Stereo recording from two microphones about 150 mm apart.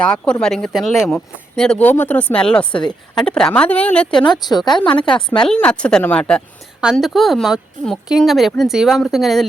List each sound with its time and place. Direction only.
0.0 s speech: 5° left (ahead or behind)
4.1 s a woman's voice: 30° left (ahead or behind)
5.1 s speech: 5° left (ahead or behind)